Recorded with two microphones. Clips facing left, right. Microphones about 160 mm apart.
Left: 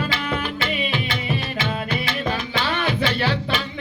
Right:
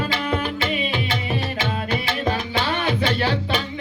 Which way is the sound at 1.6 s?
45° right (ahead or behind).